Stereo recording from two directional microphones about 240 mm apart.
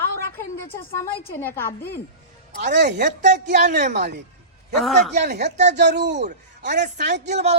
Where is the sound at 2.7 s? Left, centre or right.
Right.